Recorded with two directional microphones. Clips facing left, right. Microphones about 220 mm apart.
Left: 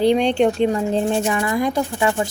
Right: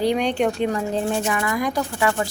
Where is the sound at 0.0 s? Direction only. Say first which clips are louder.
Left 4 dB; 25° left (ahead or behind).